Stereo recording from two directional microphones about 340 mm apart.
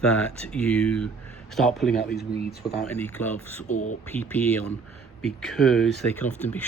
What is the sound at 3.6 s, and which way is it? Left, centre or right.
Speech, left.